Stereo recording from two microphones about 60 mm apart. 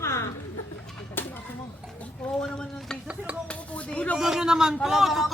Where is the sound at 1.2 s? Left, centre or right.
Left.